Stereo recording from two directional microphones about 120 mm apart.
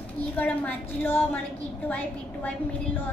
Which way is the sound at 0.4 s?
15° left (ahead or behind).